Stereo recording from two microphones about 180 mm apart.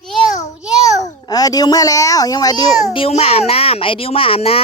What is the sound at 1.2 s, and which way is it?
A child's voice, 20° left (ahead or behind).